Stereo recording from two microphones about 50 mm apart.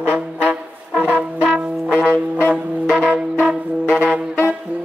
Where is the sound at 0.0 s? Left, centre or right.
Right.